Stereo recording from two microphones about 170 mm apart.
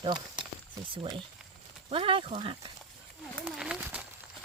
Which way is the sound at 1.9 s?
30° right (ahead or behind).